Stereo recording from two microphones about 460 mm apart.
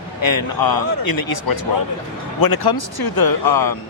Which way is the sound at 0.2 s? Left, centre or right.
Left.